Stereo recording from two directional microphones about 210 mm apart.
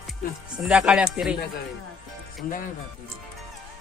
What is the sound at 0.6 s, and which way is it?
Speech, 5° right (ahead or behind).